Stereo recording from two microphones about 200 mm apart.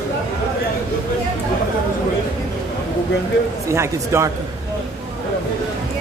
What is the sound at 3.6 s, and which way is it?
Speech, 15° right (ahead or behind).